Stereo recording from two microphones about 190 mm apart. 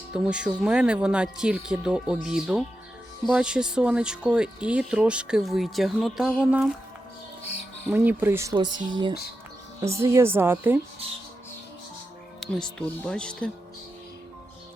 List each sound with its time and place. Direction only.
0.1 s speech: 5° right (ahead or behind)
7.9 s a woman's voice: 10° right (ahead or behind)
12.4 s speech: 5° left (ahead or behind)